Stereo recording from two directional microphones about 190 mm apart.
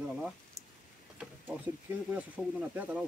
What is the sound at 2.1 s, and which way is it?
Speech, 10° right (ahead or behind).